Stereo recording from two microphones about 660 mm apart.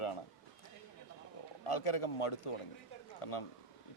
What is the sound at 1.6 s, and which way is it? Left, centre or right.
Speech, left.